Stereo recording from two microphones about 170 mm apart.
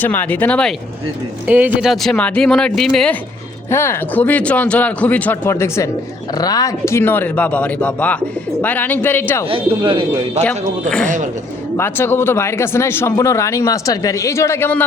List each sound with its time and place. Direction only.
0.0 s speech: 10° left (ahead or behind)
1.5 s speech: 10° right (ahead or behind)
3.7 s speech: 15° left (ahead or behind)
9.5 s speech: 30° right (ahead or behind)
10.4 s speech: 5° left (ahead or behind)